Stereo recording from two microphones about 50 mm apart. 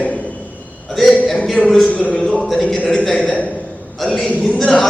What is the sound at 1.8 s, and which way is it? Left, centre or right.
Speech, left.